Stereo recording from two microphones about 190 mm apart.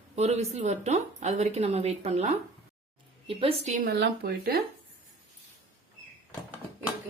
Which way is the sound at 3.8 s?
60° right (ahead or behind).